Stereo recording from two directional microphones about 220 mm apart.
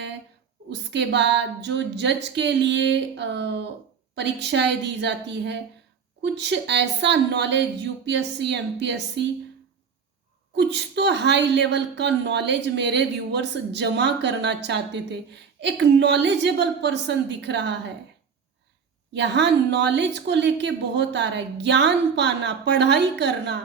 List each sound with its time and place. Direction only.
0.7 s speech: 50° right (ahead or behind)
10.5 s speech: 50° right (ahead or behind)
19.1 s speech: 50° right (ahead or behind)